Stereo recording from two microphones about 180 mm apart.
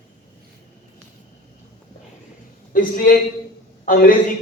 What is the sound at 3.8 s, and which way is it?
Speech, 50° left (ahead or behind).